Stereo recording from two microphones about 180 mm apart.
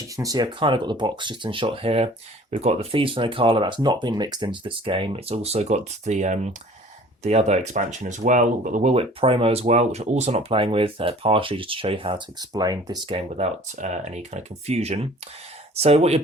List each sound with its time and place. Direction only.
0.0 s speech: 20° right (ahead or behind)
13.1 s speech: 35° right (ahead or behind)